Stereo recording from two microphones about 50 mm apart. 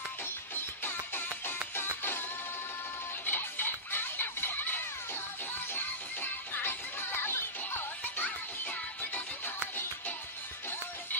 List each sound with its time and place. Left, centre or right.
0.6 s music: left
3.3 s music: left
8.2 s music: left